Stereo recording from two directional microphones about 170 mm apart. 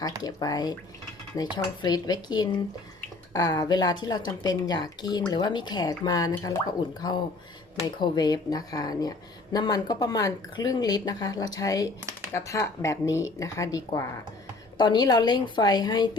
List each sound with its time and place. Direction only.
0.2 s speech: 25° left (ahead or behind)